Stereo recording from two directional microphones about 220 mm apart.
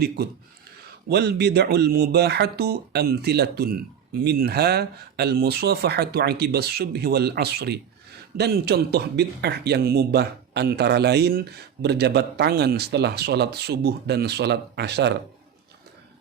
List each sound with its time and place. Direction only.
1.1 s speech: 50° right (ahead or behind)